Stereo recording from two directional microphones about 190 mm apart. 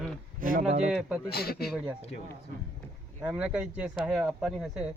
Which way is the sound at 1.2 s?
55° left (ahead or behind).